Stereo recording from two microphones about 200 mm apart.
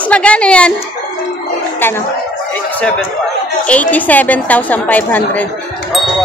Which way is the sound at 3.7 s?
5° left (ahead or behind).